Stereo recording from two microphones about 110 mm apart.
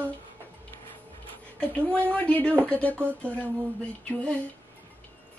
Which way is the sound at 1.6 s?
10° left (ahead or behind).